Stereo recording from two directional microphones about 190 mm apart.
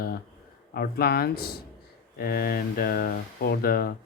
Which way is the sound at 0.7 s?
55° left (ahead or behind).